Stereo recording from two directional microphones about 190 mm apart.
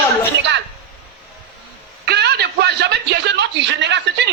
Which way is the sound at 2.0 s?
60° right (ahead or behind).